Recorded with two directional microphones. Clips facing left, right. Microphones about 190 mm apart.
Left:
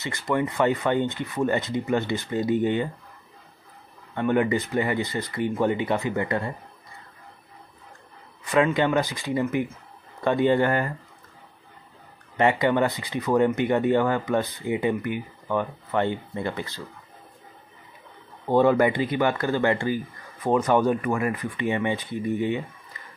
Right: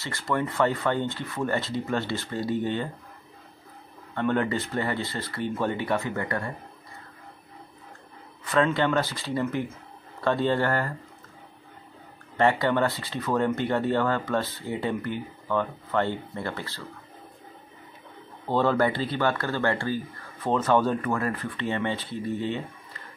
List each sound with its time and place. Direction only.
0.0 s speech: 15° left (ahead or behind)
4.1 s speech: 15° left (ahead or behind)
8.5 s speech: 15° left (ahead or behind)
12.4 s speech: 15° left (ahead or behind)
18.5 s speech: 15° left (ahead or behind)